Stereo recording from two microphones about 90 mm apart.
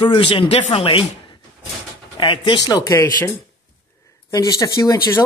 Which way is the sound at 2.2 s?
65° left (ahead or behind).